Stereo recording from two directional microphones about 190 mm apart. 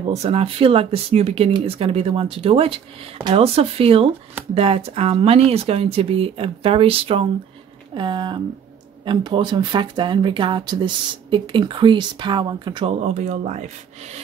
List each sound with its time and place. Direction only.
0.1 s speech: 30° right (ahead or behind)
13.0 s speech: 35° right (ahead or behind)